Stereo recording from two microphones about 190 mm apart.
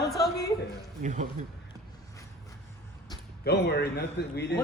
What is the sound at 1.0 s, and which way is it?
Speech, 40° right (ahead or behind).